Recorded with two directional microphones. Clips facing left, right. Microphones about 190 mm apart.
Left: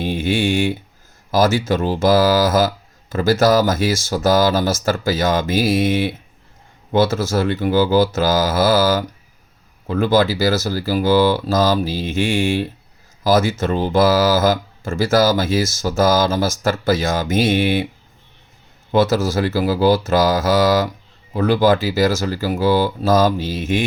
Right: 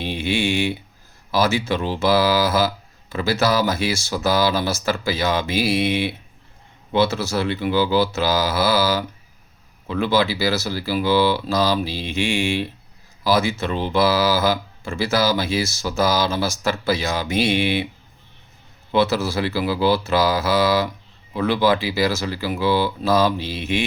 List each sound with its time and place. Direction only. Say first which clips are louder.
0.0 s a sound: left 4 dB; 45° left (ahead or behind)
1.3 s speech: left 4 dB; 45° left (ahead or behind)
18.9 s speech: left 3 dB; 45° left (ahead or behind)